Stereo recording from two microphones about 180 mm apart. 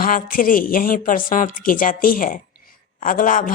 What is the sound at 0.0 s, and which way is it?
Speech, 50° left (ahead or behind).